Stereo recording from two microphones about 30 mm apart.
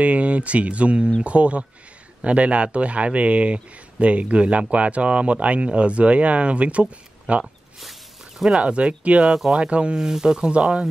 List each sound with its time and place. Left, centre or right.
0.0 s a man's voice: right
8.5 s speech: right
9.9 s speech: right